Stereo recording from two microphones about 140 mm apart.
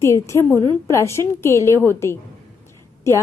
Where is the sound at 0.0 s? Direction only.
20° left (ahead or behind).